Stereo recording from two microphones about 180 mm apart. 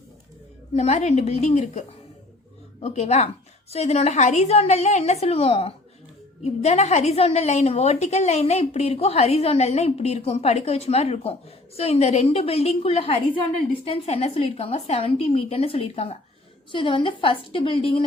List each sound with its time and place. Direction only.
0.7 s a woman's voice: 35° left (ahead or behind)
2.8 s a woman's voice: 35° left (ahead or behind)